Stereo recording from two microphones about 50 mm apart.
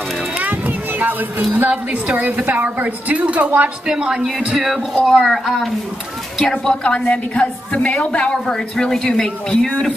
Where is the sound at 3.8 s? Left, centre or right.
Centre.